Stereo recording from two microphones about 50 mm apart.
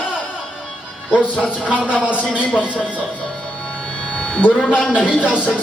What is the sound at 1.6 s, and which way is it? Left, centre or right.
Speech, right.